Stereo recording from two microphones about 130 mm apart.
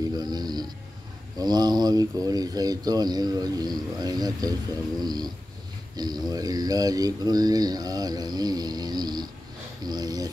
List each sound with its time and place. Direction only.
0.1 s music: 30° right (ahead or behind)
1.4 s speech: 30° right (ahead or behind)